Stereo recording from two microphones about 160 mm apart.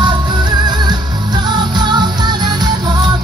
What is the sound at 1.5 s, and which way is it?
Music, 25° right (ahead or behind).